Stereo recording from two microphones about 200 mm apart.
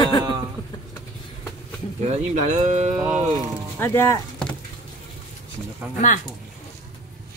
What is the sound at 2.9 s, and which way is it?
Speech, 10° right (ahead or behind).